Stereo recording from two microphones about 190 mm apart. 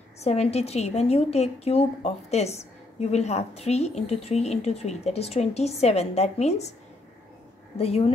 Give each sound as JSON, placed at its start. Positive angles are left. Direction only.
{"t": 0.2, "sound": "a woman's voice", "side_deg": 35}
{"t": 7.7, "sound": "speech", "side_deg": 35}